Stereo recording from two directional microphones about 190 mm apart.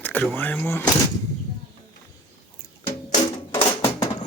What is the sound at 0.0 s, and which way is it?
Speech, 10° left (ahead or behind).